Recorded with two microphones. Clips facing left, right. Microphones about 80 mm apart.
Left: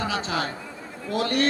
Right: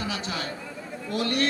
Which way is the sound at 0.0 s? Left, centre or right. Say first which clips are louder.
Left 5 dB; left.